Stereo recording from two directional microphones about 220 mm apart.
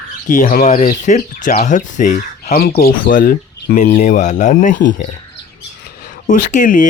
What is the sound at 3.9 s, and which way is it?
Speech, 35° left (ahead or behind).